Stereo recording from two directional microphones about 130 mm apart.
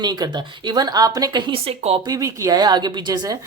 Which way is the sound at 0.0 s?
30° right (ahead or behind).